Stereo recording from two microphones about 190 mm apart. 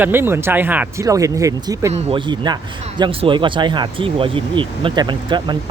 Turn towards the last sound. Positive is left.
turn(degrees=-25)  # may be behind; listen again after turning